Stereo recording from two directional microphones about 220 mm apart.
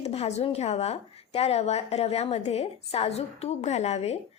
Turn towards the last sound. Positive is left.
turn(degrees=30)  # may be behind; listen again after turning